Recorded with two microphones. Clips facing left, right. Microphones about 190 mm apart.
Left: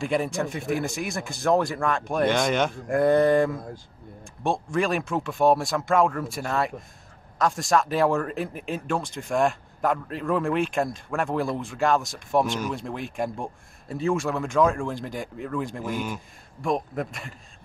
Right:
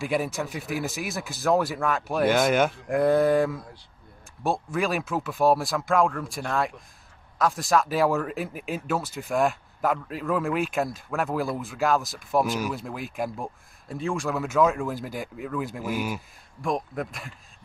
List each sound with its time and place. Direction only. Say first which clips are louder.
0.0 s speech: left 2 dB; 5° right (ahead or behind)
3.5 s speech: left 4 dB; 50° left (ahead or behind)
4.4 s speech: left 1 dB; 5° right (ahead or behind)